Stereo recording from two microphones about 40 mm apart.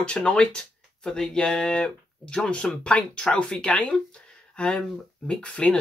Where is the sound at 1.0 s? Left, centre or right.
Centre.